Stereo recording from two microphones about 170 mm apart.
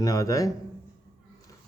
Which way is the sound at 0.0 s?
20° left (ahead or behind).